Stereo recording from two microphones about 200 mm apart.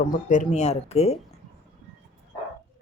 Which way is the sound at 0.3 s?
35° left (ahead or behind).